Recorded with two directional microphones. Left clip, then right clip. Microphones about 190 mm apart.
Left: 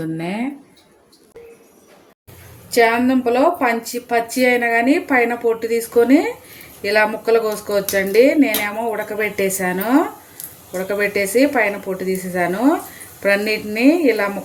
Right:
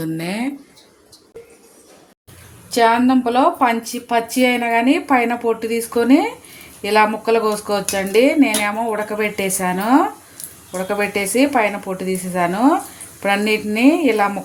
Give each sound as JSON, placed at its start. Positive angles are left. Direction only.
{"t": 0.0, "sound": "speech", "side_deg": -5}
{"t": 2.6, "sound": "speech", "side_deg": -25}